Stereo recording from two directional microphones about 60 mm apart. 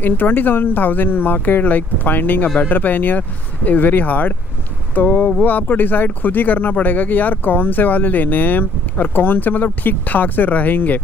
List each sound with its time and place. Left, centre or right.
0.0 s speech: left